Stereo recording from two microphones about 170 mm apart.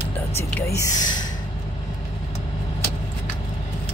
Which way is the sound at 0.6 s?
15° left (ahead or behind).